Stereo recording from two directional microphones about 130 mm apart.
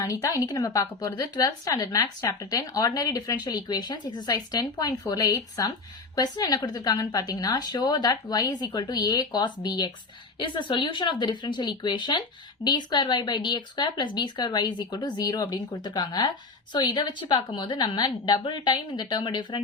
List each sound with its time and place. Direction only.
0.0 s a woman's voice: 25° left (ahead or behind)